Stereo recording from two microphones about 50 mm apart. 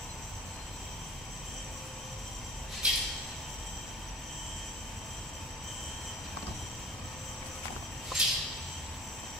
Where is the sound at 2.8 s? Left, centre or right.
Centre.